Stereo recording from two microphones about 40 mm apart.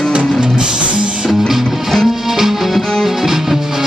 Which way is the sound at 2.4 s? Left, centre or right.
Centre.